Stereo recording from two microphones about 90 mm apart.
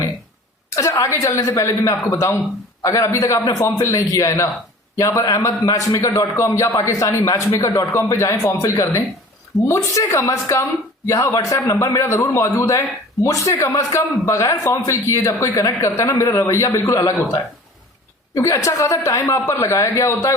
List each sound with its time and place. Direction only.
0.8 s a man's voice: 35° left (ahead or behind)
18.3 s a man's voice: 35° left (ahead or behind)